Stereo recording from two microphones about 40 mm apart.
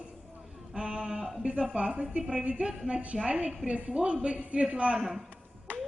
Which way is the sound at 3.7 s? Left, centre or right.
Right.